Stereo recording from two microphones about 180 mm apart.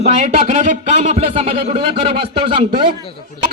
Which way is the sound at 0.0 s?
45° right (ahead or behind).